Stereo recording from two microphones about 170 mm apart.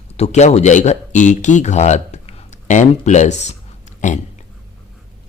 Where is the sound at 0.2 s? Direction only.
40° left (ahead or behind).